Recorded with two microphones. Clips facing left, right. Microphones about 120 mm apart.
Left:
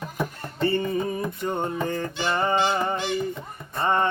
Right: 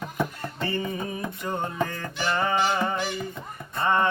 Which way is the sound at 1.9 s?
25° left (ahead or behind).